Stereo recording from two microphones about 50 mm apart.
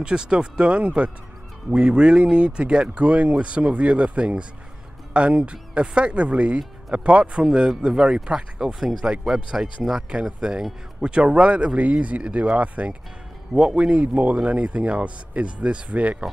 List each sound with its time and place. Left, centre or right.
0.0 s speech: centre